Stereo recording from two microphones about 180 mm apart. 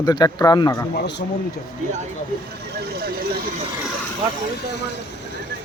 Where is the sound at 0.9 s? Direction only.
70° left (ahead or behind).